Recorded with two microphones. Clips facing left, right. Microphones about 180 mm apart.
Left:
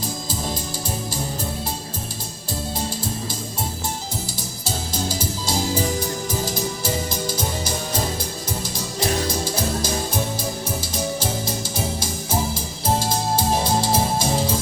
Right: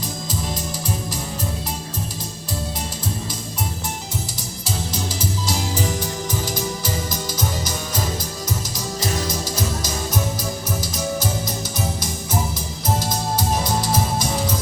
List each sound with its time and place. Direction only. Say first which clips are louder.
6.8 s music: left 2 dB; 30° left (ahead or behind)
9.2 s music: left 1 dB; 30° left (ahead or behind)